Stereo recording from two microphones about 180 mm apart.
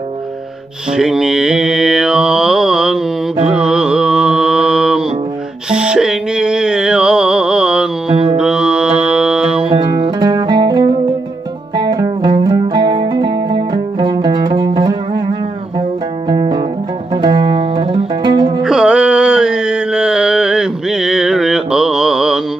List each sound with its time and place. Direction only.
0.9 s mantra: 5° right (ahead or behind)
5.7 s music: 5° right (ahead or behind)
8.1 s mantra: 30° right (ahead or behind)
8.4 s music: 5° right (ahead or behind)
9.7 s music: 30° right (ahead or behind)
16.3 s music: 25° right (ahead or behind)
18.6 s music: 5° right (ahead or behind)